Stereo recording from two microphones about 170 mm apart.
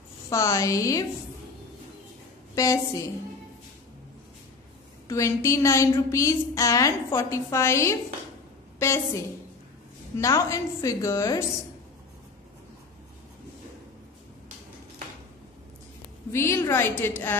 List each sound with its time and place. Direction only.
0.3 s a woman's voice: 15° left (ahead or behind)
2.5 s a woman's voice: 20° left (ahead or behind)
5.0 s a woman's voice: 15° left (ahead or behind)
16.3 s a woman's voice: 15° left (ahead or behind)